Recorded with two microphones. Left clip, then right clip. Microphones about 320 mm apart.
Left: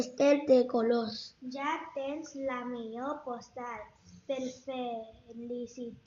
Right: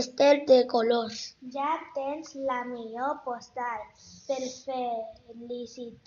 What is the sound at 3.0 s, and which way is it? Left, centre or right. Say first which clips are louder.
Speech: right 9 dB; right.